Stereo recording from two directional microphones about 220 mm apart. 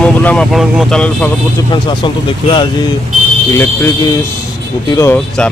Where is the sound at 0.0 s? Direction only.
5° left (ahead or behind).